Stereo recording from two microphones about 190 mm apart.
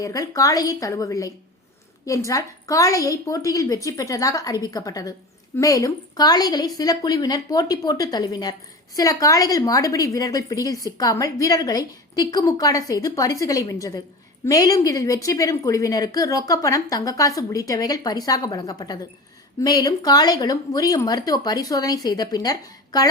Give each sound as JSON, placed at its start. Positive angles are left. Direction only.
{"t": 0.0, "sound": "a woman's voice", "side_deg": 20}